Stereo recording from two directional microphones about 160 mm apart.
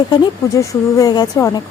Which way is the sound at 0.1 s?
20° left (ahead or behind).